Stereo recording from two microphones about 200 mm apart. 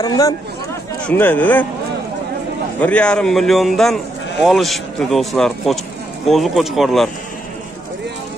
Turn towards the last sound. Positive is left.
turn(degrees=0)  # may be behind; listen again after turning